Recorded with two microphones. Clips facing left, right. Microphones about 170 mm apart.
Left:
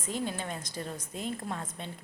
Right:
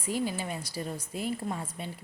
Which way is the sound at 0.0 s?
5° right (ahead or behind).